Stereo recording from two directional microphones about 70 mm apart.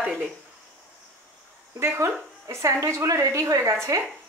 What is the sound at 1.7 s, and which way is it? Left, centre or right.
A woman's voice, right.